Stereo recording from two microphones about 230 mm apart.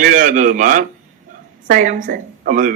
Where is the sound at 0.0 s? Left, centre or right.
Right.